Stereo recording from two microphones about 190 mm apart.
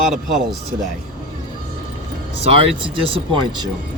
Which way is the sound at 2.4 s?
30° right (ahead or behind).